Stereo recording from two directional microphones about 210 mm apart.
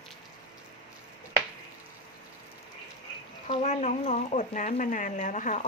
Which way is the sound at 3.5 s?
35° left (ahead or behind).